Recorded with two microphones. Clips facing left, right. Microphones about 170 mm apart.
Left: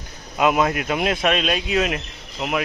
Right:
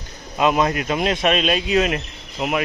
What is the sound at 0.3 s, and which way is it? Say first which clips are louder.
Speech: even; 5° left (ahead or behind).